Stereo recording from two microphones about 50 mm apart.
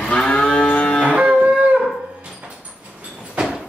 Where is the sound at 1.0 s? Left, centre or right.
Centre.